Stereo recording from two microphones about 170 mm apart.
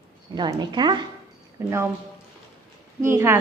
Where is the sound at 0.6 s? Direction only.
25° right (ahead or behind).